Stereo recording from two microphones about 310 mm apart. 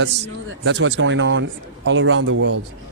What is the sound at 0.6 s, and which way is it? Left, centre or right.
Speech, right.